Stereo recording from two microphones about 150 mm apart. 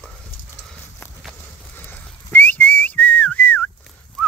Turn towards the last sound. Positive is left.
turn(degrees=5)  # may be behind; listen again after turning